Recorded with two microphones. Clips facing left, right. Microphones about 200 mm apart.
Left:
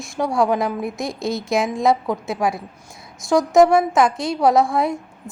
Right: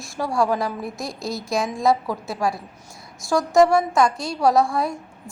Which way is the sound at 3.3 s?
Centre (ahead or behind).